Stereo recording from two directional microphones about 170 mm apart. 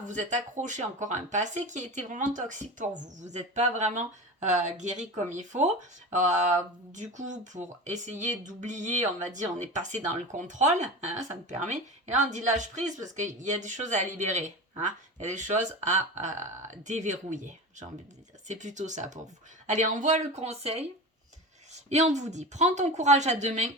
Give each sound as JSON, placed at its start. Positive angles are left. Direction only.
{"t": 0.0, "sound": "speech", "side_deg": -45}
{"t": 21.8, "sound": "speech", "side_deg": -45}